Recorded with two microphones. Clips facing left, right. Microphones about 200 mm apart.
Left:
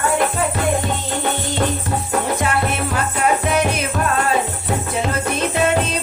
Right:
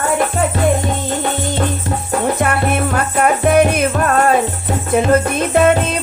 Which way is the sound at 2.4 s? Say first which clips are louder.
Right 4 dB; 55° right (ahead or behind).